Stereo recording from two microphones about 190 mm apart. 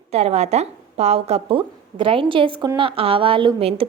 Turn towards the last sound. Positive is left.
turn(degrees=-30)  # may be behind; listen again after turning